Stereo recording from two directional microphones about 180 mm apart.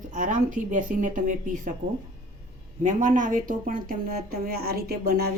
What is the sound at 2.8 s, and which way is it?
Speech, 45° right (ahead or behind).